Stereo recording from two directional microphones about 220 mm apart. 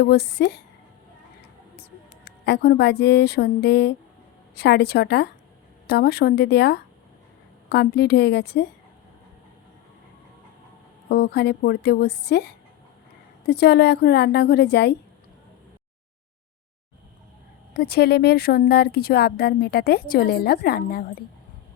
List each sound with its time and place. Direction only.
0.0 s speech: 50° left (ahead or behind)
2.2 s speech: 50° left (ahead or behind)
11.1 s speech: 45° left (ahead or behind)
13.5 s speech: 45° left (ahead or behind)
17.7 s speech: 45° left (ahead or behind)